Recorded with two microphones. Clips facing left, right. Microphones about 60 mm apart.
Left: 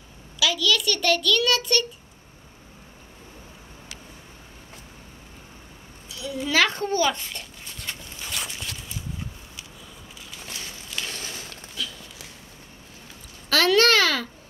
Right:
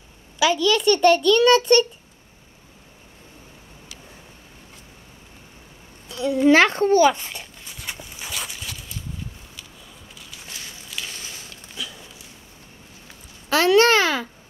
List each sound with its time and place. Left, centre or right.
0.4 s a child's voice: right
6.0 s a child's voice: right
7.3 s dog: centre
8.4 s a sound: centre
11.7 s a sound: centre
13.5 s a child's voice: right